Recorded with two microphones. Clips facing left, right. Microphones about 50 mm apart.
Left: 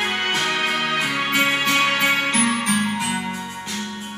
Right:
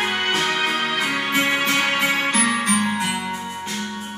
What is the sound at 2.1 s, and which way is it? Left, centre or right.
Music, right.